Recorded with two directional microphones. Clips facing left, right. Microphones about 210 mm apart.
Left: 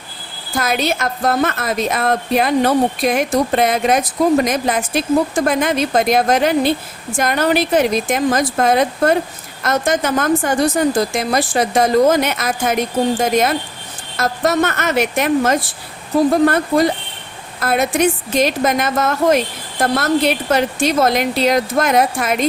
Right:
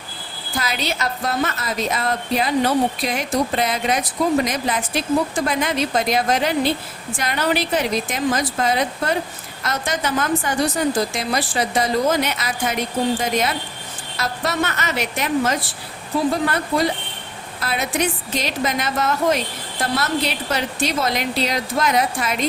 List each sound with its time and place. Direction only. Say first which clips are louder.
0.5 s a woman's voice: left 6 dB; 50° left (ahead or behind)